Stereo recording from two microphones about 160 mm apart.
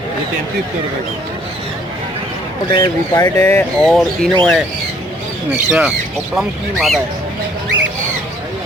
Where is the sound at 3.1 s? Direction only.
20° left (ahead or behind).